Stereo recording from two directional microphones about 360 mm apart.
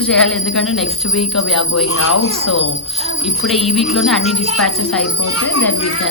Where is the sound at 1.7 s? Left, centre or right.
Left.